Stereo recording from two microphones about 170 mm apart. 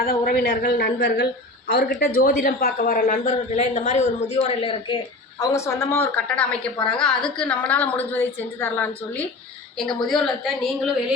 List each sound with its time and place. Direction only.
0.0 s a woman's voice: 60° left (ahead or behind); by 4.0 s 45° left (ahead or behind)
4.4 s a woman's voice: 30° left (ahead or behind)
5.4 s a woman's voice: 20° left (ahead or behind); by 10.9 s centre (ahead or behind)